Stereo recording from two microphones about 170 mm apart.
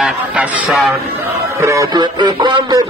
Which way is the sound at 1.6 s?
20° right (ahead or behind).